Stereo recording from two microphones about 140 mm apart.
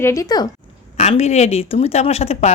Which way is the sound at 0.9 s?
50° left (ahead or behind).